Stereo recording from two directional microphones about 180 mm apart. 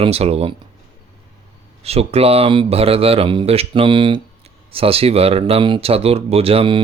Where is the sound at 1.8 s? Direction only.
35° right (ahead or behind).